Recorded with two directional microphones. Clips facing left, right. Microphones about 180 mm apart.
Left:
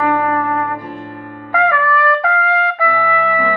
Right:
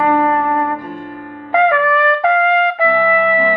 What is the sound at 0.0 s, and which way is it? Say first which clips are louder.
Music: right 2 dB; 25° right (ahead or behind).